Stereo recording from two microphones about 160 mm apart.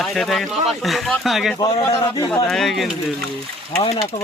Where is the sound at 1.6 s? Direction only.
20° left (ahead or behind).